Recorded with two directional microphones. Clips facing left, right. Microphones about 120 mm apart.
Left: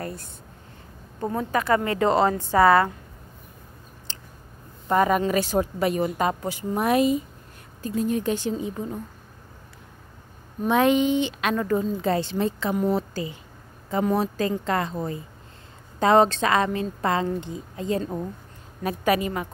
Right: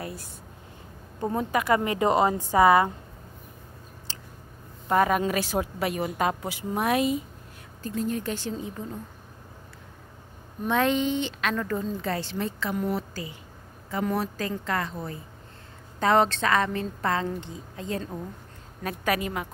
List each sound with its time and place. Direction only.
0.0 s a sound: 10° right (ahead or behind)
1.2 s a woman's voice: 15° right (ahead or behind)
4.8 s a woman's voice: centre (ahead or behind)
7.8 s a woman's voice: 10° left (ahead or behind)
10.7 s a woman's voice: 10° left (ahead or behind)